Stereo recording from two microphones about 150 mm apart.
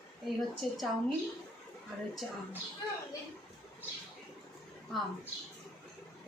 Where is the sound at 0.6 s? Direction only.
Centre (ahead or behind).